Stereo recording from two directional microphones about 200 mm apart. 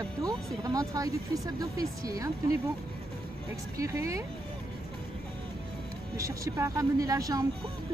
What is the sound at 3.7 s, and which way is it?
Speech, 15° right (ahead or behind).